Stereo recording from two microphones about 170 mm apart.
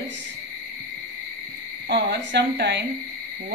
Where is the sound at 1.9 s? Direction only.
75° right (ahead or behind).